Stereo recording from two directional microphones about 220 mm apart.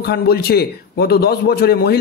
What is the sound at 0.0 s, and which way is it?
A man's voice, 45° left (ahead or behind).